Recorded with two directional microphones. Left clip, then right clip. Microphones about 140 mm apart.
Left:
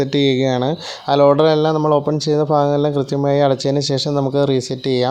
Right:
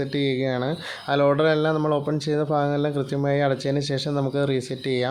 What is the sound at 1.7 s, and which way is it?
Speech, 30° left (ahead or behind).